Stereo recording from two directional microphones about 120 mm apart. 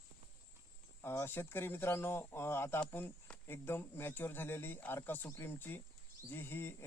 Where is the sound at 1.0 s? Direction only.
20° left (ahead or behind).